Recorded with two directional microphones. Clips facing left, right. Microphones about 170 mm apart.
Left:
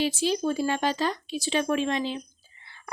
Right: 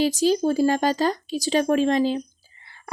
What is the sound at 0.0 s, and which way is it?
Speech, 40° right (ahead or behind).